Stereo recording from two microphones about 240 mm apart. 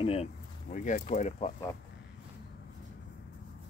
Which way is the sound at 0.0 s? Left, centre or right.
Left.